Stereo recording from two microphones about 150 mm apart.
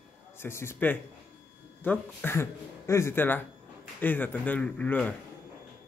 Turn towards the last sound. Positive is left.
turn(degrees=10)  # may be behind; listen again after turning